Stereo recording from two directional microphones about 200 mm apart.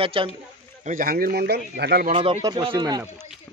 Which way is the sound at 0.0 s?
25° right (ahead or behind).